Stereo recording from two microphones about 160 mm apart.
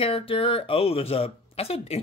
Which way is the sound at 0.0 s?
35° left (ahead or behind).